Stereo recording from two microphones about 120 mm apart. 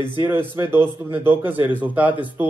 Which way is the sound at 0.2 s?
20° right (ahead or behind).